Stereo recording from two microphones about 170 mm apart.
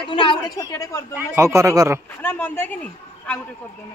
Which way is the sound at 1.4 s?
15° right (ahead or behind).